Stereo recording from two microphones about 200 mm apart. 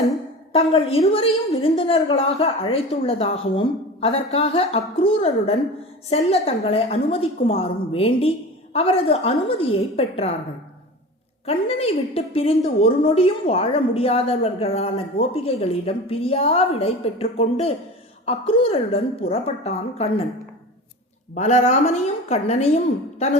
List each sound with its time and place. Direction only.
0.5 s a woman's voice: 30° left (ahead or behind)
11.4 s a woman's voice: 30° left (ahead or behind)
21.3 s a woman's voice: 35° left (ahead or behind)